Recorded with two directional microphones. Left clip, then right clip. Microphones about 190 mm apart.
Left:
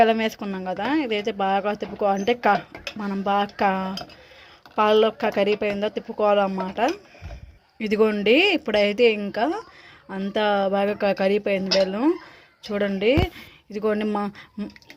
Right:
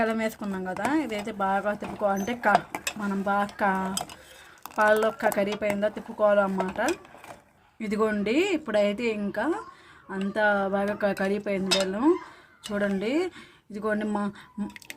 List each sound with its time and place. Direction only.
0.0 s speech: 15° left (ahead or behind)